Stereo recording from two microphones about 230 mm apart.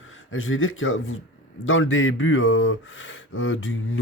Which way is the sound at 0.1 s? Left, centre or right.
Left.